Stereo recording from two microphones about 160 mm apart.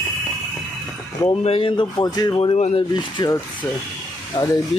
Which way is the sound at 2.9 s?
25° left (ahead or behind).